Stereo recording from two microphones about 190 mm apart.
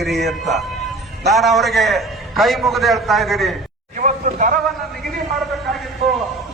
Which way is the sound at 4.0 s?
40° right (ahead or behind).